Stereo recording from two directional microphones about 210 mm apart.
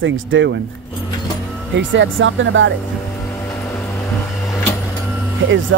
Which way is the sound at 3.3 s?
10° left (ahead or behind).